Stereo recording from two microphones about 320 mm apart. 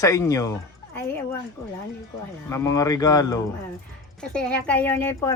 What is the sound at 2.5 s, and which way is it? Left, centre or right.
A woman's voice, centre.